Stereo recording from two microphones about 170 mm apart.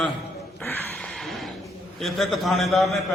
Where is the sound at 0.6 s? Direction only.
10° left (ahead or behind).